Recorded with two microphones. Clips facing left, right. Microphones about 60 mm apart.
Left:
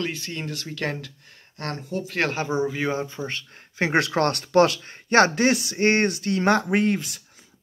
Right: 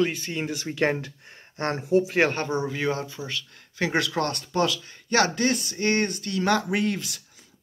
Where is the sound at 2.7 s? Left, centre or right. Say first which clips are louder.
Left 1 dB; left.